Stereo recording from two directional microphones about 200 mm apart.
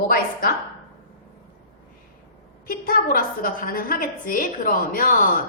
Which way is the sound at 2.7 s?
45° left (ahead or behind).